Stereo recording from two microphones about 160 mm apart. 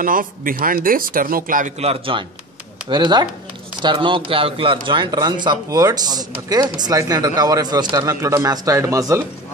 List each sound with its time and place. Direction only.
0.0 s speech: 60° right (ahead or behind)
1.8 s a man's voice: 35° right (ahead or behind); by 9.2 s 20° right (ahead or behind)